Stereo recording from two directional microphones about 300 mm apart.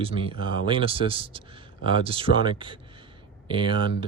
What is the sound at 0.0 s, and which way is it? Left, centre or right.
Speech, centre.